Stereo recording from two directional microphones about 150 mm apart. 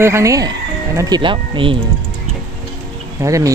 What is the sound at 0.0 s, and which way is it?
Speech, 20° right (ahead or behind).